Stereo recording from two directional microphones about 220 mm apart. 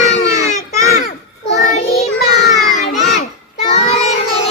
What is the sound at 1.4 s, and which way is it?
Child singing, 50° left (ahead or behind).